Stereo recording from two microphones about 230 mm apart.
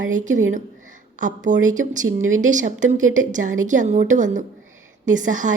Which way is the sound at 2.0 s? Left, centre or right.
Right.